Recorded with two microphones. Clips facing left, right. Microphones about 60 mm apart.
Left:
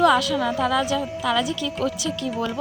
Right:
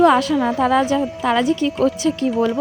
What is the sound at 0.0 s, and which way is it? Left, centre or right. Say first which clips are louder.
A woman's voice: right 4 dB; right.